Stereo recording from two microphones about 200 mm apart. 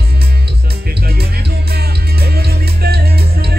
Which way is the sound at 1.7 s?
50° right (ahead or behind).